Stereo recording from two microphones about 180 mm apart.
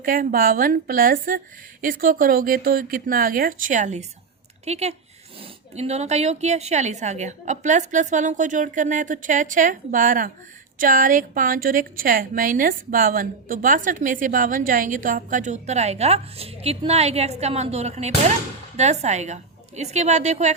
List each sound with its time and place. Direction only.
0.0 s a woman's voice: 50° right (ahead or behind)